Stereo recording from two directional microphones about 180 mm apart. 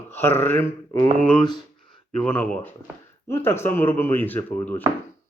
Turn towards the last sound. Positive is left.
turn(degrees=10)  # may be behind; listen again after turning